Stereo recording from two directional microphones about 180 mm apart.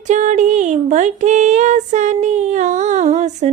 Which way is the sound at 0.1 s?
40° right (ahead or behind).